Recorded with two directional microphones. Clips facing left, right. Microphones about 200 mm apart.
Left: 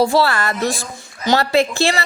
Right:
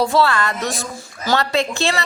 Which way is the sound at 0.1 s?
30° left (ahead or behind).